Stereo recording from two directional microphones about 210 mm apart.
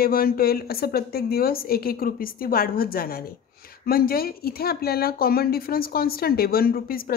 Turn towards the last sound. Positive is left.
turn(degrees=45)  # may be behind; listen again after turning